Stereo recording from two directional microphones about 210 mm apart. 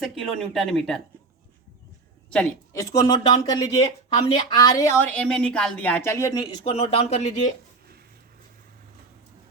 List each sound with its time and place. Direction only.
0.0 s speech: centre (ahead or behind)
2.7 s speech: 15° left (ahead or behind); by 7.5 s 35° left (ahead or behind)